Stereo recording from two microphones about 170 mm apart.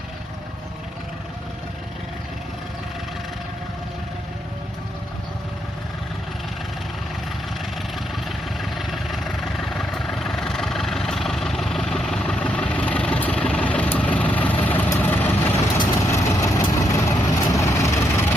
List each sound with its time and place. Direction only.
8.6 s vehicle: centre (ahead or behind); by 18.3 s 15° left (ahead or behind)